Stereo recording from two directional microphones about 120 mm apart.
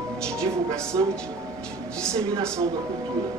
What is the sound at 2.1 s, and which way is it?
Speech, 25° right (ahead or behind).